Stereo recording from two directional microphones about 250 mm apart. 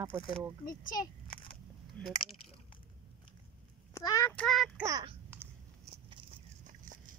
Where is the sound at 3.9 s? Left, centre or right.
Centre.